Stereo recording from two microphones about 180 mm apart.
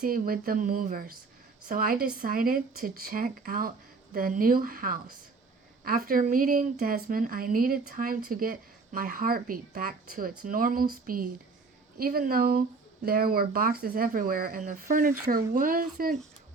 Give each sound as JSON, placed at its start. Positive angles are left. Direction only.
{"t": 0.0, "sound": "a woman's voice", "side_deg": -50}